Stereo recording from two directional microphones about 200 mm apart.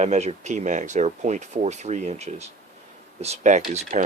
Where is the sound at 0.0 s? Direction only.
35° right (ahead or behind).